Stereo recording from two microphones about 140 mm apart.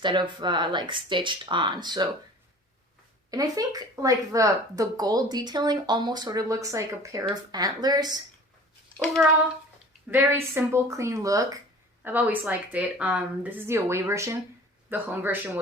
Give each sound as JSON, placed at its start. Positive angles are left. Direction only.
{"t": 0.0, "sound": "speech", "side_deg": -35}
{"t": 3.2, "sound": "speech", "side_deg": -25}
{"t": 9.2, "sound": "speech", "side_deg": -10}
{"t": 12.0, "sound": "speech", "side_deg": -10}